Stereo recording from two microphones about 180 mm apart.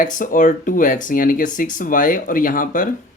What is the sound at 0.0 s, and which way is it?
Speech, 45° left (ahead or behind).